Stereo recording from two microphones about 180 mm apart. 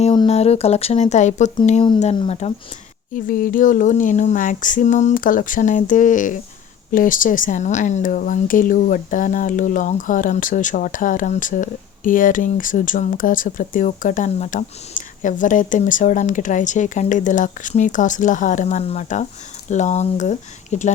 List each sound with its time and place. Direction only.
0.0 s speech: 30° left (ahead or behind)
3.2 s speech: 50° left (ahead or behind)